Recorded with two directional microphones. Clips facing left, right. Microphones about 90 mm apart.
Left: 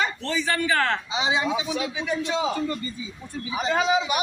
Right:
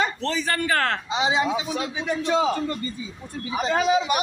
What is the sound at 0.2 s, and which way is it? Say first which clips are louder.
A man's voice: even; 45° right (ahead or behind).